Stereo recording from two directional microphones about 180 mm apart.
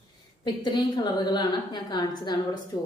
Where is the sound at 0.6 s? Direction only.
25° left (ahead or behind).